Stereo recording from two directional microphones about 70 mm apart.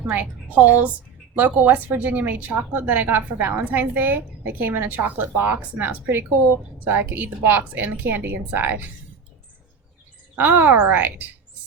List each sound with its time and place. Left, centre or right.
0.1 s a woman's voice: right
10.3 s a woman's voice: right